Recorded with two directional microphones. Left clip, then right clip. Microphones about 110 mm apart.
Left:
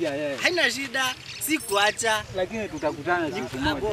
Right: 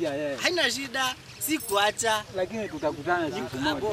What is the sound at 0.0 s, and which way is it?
Speech, centre (ahead or behind).